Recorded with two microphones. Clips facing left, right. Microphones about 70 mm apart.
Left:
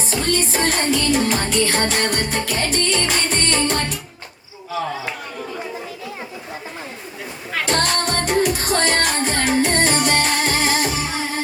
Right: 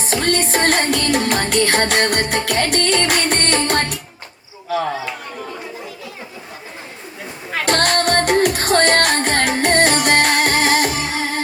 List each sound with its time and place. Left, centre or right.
0.0 s music: right
7.6 s music: right